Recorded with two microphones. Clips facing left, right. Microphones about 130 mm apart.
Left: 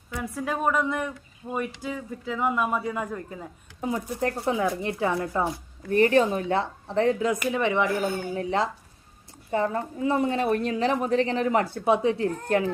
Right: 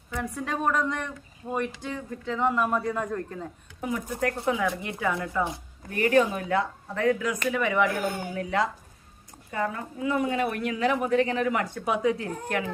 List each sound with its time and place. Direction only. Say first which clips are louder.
0.1 s speech: left 1 dB; 5° left (ahead or behind)
3.8 s speech: left 1 dB; 30° left (ahead or behind)
7.9 s speech: left 2 dB; centre (ahead or behind)
8.3 s a woman's voice: left 1 dB; 25° left (ahead or behind)